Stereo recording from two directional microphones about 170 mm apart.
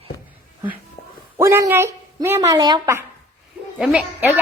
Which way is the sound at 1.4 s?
15° right (ahead or behind).